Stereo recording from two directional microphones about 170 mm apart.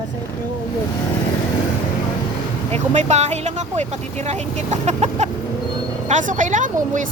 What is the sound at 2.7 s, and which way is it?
Speech, 40° right (ahead or behind).